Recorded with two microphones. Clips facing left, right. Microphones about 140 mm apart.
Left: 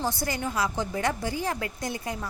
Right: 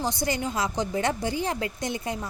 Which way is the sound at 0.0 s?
20° right (ahead or behind).